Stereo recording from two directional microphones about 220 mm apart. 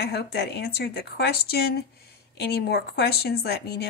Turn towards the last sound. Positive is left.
turn(degrees=45)  # may be behind; listen again after turning